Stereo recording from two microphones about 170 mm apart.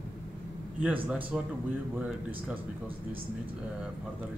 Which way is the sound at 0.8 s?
10° right (ahead or behind).